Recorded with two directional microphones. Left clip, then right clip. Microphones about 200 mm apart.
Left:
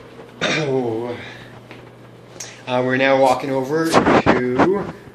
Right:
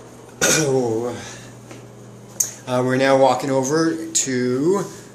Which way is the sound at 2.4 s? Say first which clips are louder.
Even; 5° right (ahead or behind).